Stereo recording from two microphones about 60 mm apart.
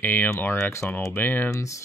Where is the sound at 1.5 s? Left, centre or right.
Left.